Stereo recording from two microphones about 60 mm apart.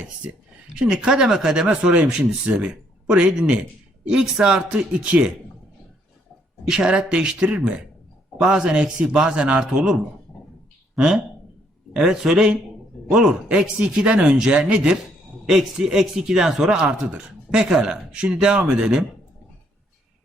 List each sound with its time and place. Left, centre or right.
0.8 s speech: centre
6.7 s speech: centre